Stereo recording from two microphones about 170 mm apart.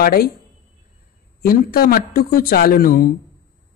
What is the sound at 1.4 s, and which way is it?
Speech, 60° left (ahead or behind).